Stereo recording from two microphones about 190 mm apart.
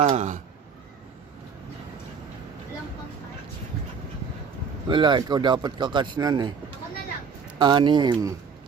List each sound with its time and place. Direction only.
0.0 s speech: 40° right (ahead or behind)
4.9 s speech: 25° right (ahead or behind)
7.6 s speech: 25° right (ahead or behind)